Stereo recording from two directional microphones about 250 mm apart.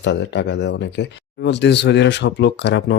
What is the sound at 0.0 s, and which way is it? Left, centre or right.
Speech, left.